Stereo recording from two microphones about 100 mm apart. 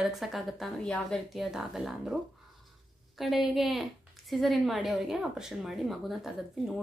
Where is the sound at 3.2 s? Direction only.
Centre (ahead or behind).